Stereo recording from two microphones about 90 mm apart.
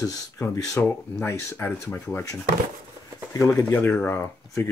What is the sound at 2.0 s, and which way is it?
Speech, 35° left (ahead or behind).